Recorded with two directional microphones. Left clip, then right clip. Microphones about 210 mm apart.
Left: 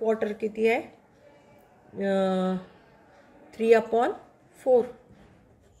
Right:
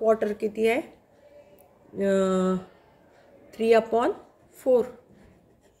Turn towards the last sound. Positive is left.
turn(degrees=-30)  # may be behind; listen again after turning